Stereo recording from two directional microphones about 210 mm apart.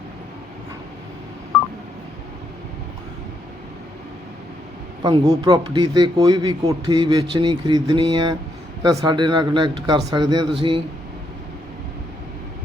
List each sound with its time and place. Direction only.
5.0 s speech: 20° right (ahead or behind)